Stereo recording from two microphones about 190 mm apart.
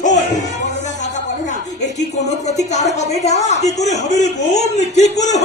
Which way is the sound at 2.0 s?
35° left (ahead or behind).